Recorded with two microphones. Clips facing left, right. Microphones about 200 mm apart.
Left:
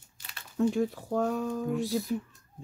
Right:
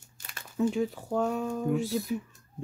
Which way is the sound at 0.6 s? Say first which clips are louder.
Left 1 dB; centre (ahead or behind).